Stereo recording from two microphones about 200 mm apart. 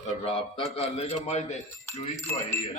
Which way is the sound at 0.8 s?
30° left (ahead or behind).